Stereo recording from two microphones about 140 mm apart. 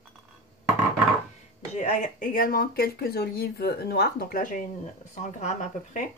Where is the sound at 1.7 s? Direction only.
60° left (ahead or behind).